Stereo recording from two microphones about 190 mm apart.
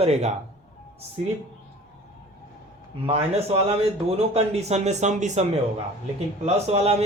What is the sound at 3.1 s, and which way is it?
A man's voice, 30° right (ahead or behind).